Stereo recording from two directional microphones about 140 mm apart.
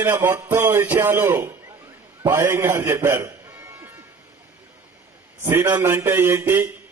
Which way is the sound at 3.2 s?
20° right (ahead or behind).